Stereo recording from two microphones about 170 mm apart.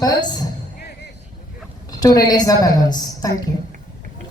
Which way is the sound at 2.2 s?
20° left (ahead or behind).